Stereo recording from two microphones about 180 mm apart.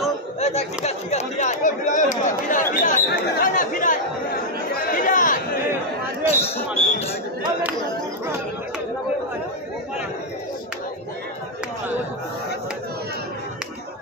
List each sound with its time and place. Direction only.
0.4 s speech: 35° left (ahead or behind)
4.9 s chatter: 45° left (ahead or behind)
6.2 s speech: 35° left (ahead or behind)